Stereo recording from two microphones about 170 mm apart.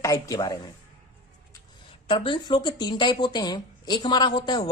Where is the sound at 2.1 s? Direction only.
30° left (ahead or behind).